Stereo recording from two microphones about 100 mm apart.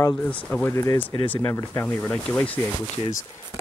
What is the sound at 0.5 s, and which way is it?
Speech, 25° left (ahead or behind).